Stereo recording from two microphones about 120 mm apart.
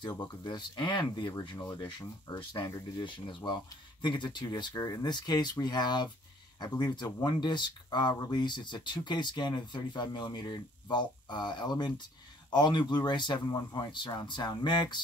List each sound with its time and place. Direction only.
0.2 s speech: 40° left (ahead or behind)